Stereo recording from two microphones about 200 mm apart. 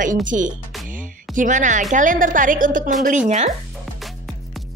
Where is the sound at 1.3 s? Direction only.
40° right (ahead or behind).